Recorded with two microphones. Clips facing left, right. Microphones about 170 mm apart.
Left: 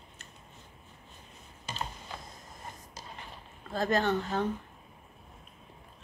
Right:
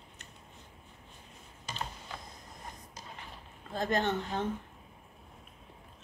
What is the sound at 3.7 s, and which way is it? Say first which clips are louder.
Speech: left 3 dB; 20° right (ahead or behind).